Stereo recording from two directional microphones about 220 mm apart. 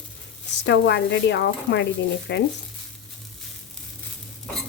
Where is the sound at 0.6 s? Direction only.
50° left (ahead or behind).